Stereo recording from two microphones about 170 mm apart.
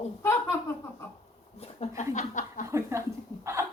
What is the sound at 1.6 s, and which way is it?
Speech, 40° left (ahead or behind).